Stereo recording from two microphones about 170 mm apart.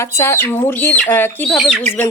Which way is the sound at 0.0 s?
15° left (ahead or behind).